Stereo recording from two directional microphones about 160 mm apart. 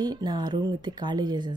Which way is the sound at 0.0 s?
25° right (ahead or behind).